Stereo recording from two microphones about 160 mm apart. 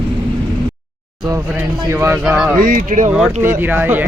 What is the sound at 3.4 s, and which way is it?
Speech, 15° right (ahead or behind).